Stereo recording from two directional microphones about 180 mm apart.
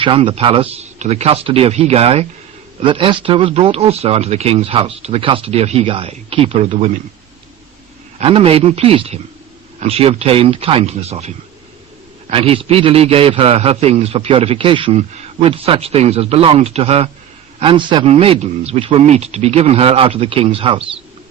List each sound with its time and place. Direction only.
0.0 s a man's voice: 30° right (ahead or behind)
8.2 s a man's voice: 30° right (ahead or behind)